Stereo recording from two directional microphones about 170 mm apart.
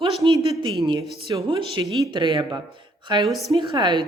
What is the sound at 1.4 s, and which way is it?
Speech, 30° right (ahead or behind).